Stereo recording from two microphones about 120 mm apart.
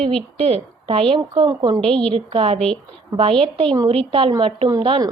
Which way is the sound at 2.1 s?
55° right (ahead or behind).